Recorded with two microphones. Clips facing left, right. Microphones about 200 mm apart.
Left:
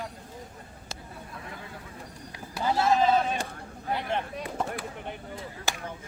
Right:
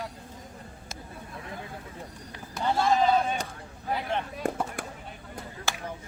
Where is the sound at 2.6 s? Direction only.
5° left (ahead or behind).